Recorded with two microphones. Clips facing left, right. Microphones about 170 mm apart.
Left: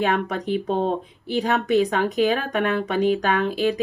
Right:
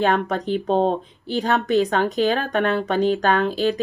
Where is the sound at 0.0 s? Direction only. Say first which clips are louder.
Right 2 dB; 35° right (ahead or behind).